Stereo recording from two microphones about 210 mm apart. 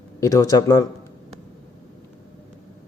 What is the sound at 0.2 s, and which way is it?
Speech, 15° left (ahead or behind).